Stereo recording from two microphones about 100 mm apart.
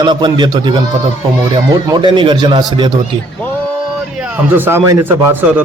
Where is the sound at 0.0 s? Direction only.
50° right (ahead or behind).